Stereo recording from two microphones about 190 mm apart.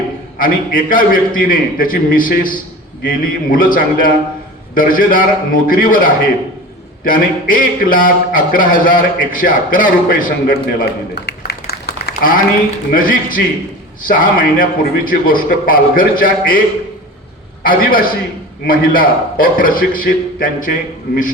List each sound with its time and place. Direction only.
0.3 s a man's voice: 45° left (ahead or behind)
17.6 s a man's voice: 50° left (ahead or behind)